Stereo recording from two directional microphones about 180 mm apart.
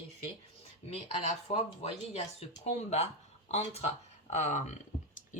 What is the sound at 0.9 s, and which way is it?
Speech, 35° left (ahead or behind).